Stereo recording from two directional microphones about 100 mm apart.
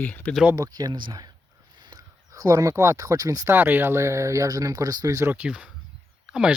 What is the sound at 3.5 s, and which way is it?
Speech, 20° right (ahead or behind).